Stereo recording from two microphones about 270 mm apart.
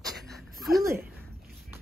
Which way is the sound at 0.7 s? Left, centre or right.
Centre.